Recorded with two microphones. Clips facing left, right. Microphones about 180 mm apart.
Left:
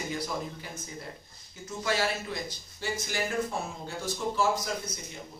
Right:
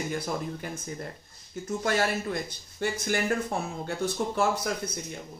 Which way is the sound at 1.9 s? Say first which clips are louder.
Right 2 dB; 55° right (ahead or behind).